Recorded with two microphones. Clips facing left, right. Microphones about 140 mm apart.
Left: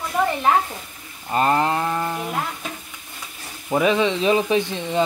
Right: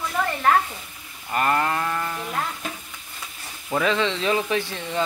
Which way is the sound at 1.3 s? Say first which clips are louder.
Left 3 dB; 25° left (ahead or behind).